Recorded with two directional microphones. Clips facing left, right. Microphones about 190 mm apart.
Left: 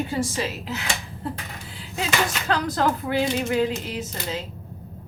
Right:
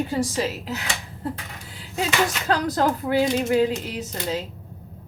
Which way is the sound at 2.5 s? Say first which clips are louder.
Even; 40° right (ahead or behind).